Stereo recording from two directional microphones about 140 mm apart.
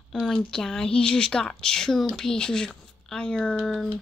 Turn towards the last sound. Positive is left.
turn(degrees=0)  # may be behind; listen again after turning